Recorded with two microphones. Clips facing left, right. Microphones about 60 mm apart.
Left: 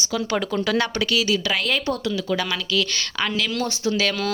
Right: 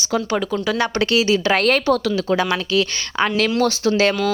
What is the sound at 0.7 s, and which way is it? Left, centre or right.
Speech, centre.